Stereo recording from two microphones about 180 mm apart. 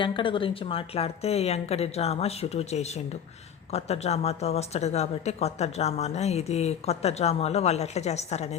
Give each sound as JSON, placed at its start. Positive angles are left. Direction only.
{"t": 0.0, "sound": "speech", "side_deg": 30}